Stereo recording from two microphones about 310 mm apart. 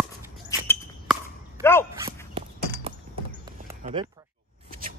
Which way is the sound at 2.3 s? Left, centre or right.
Centre.